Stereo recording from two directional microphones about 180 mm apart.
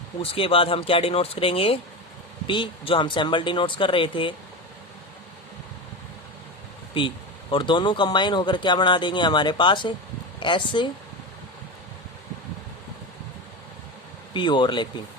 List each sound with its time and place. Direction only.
0.2 s speech: 30° left (ahead or behind)
7.0 s speech: 30° left (ahead or behind)
14.3 s speech: 25° left (ahead or behind)